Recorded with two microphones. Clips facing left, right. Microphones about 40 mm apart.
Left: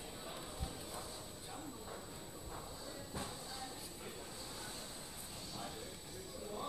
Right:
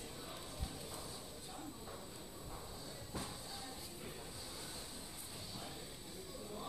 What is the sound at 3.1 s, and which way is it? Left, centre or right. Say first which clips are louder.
Music: even; centre.